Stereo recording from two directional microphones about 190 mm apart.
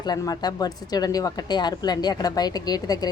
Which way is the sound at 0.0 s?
20° left (ahead or behind).